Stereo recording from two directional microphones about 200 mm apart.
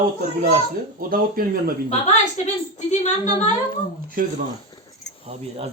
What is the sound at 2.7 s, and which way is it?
Speech, 35° left (ahead or behind).